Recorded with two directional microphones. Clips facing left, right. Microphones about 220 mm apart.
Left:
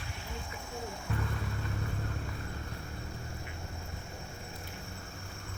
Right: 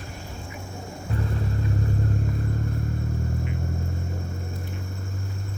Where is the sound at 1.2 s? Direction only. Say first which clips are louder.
Right 9 dB; 40° right (ahead or behind).